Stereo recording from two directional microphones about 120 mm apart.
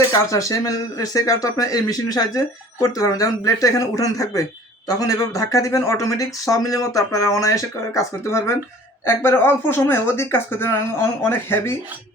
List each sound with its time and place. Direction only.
0.1 s speech: 30° left (ahead or behind)